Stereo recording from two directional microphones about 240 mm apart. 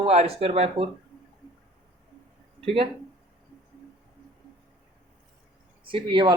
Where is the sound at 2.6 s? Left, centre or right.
Right.